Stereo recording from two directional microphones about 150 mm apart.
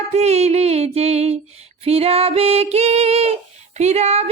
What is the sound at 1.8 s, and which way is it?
Music, 40° right (ahead or behind).